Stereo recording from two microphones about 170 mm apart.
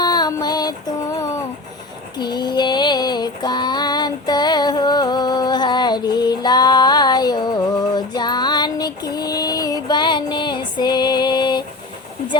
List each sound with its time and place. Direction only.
0.0 s female singing: 25° left (ahead or behind)
2.1 s female singing: 25° left (ahead or behind)